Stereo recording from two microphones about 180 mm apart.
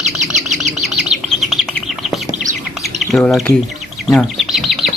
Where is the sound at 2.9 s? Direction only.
Centre (ahead or behind).